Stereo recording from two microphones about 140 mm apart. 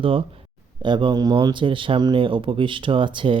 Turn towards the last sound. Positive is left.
turn(degrees=-35)  # may be behind; listen again after turning